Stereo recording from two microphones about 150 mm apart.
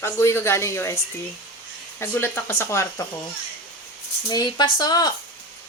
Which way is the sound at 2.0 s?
15° left (ahead or behind).